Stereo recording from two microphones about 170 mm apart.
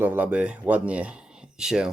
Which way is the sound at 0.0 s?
10° right (ahead or behind).